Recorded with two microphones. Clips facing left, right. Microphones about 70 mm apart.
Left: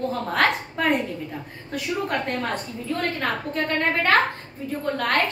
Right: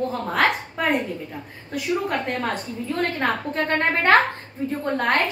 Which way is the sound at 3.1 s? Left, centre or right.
Right.